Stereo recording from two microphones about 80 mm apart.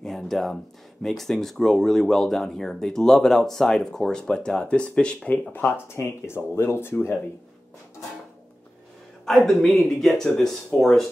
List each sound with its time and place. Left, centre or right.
0.0 s speech: centre
5.5 s speech: left
9.2 s speech: centre